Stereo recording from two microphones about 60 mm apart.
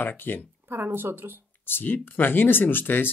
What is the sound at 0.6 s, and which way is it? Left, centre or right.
Speech, right.